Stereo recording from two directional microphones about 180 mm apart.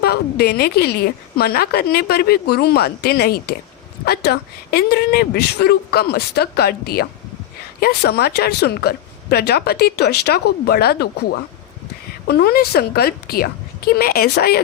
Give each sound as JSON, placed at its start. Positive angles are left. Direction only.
{"t": 0.0, "sound": "a woman's voice", "side_deg": 60}
{"t": 12.3, "sound": "a woman's voice", "side_deg": 60}